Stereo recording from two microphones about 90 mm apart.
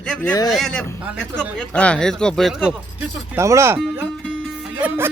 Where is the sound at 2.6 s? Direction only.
15° right (ahead or behind).